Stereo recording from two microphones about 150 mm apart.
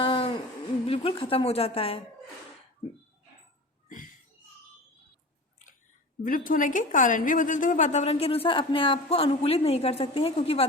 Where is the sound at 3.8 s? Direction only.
60° left (ahead or behind).